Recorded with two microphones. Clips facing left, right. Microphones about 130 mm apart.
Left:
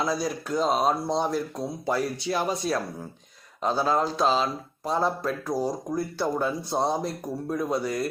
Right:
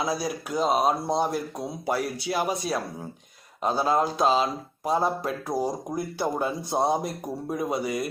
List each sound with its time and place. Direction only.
0.0 s speech: 10° right (ahead or behind)